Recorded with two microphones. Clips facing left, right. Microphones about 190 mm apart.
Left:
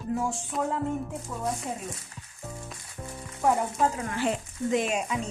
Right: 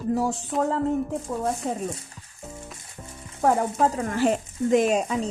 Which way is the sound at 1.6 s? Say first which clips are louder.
Right 6 dB; 35° right (ahead or behind).